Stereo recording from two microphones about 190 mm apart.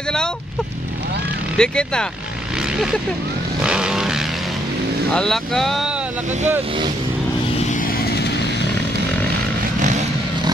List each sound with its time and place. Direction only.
1.6 s speech: 5° left (ahead or behind)
3.6 s vehicle: 5° right (ahead or behind)
5.1 s speech: centre (ahead or behind)
8.0 s vehicle: 60° left (ahead or behind)
9.8 s vehicle: 40° right (ahead or behind)